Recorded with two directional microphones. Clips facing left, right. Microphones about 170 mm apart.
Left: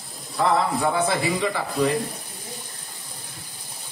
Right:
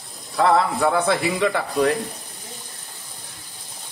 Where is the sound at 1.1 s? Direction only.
65° right (ahead or behind).